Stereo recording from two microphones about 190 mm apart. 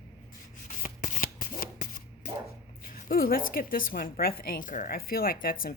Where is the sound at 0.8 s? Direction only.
45° left (ahead or behind).